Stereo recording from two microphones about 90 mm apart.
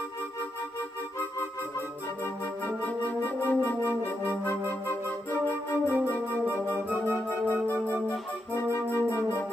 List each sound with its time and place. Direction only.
2.2 s organ: 25° left (ahead or behind)
5.5 s music: 25° left (ahead or behind)
8.7 s flute: 25° left (ahead or behind)